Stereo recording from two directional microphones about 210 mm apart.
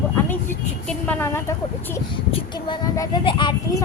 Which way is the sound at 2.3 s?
20° left (ahead or behind).